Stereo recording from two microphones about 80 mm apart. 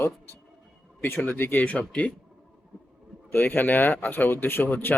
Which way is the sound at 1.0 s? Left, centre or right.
Left.